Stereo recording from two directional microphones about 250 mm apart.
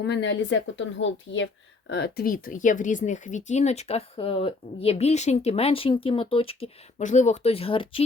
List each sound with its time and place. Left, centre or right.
0.0 s speech: left